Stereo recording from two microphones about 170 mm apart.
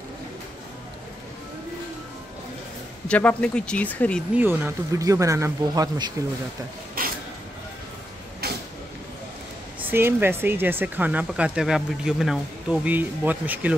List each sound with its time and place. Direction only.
3.1 s speech: 5° left (ahead or behind)
4.4 s speech: 10° right (ahead or behind)
7.0 s creak: 55° right (ahead or behind)
8.4 s creak: 65° right (ahead or behind)
9.8 s speech: 15° right (ahead or behind)